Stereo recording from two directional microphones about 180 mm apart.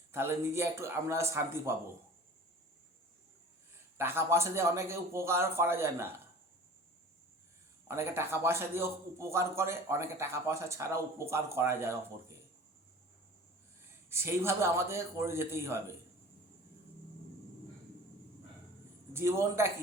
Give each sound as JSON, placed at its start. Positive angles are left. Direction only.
{"t": 0.1, "sound": "a man's voice", "side_deg": -15}
{"t": 3.9, "sound": "a man's voice", "side_deg": -15}
{"t": 7.9, "sound": "a man's voice", "side_deg": -15}
{"t": 14.1, "sound": "a man's voice", "side_deg": -15}
{"t": 19.1, "sound": "a man's voice", "side_deg": -15}